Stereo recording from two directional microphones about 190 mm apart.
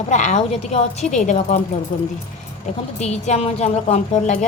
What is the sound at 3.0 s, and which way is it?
A woman's voice, 35° left (ahead or behind).